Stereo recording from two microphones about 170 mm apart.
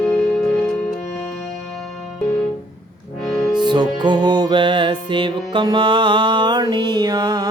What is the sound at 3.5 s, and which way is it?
Music, 25° right (ahead or behind).